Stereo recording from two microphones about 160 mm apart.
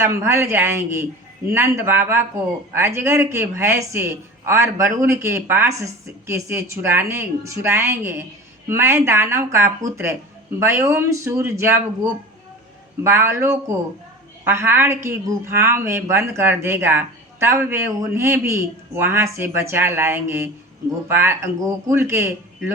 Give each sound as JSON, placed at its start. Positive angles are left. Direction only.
{"t": 0.0, "sound": "a woman's voice", "side_deg": -15}
{"t": 13.0, "sound": "a woman's voice", "side_deg": -15}